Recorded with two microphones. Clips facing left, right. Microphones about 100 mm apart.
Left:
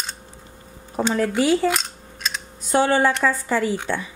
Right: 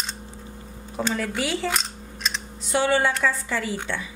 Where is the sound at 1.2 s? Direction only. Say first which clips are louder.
Left 8 dB; 40° left (ahead or behind).